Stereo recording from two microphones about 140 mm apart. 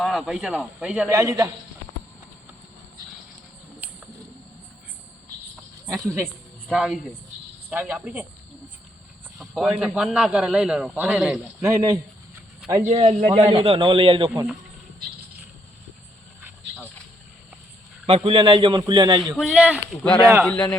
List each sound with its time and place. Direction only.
0.0 s a man's voice: centre (ahead or behind)
1.1 s a man's voice: 20° right (ahead or behind)
5.9 s a man's voice: 25° right (ahead or behind)
6.7 s a man's voice: centre (ahead or behind)
7.7 s speech: 15° right (ahead or behind)
9.4 s a man's voice: 5° right (ahead or behind)
11.6 s a man's voice: 25° right (ahead or behind)
12.9 s a man's voice: 45° right (ahead or behind)
18.0 s a man's voice: 40° right (ahead or behind)
19.4 s speech: 5° right (ahead or behind)
20.4 s a man's voice: 5° left (ahead or behind)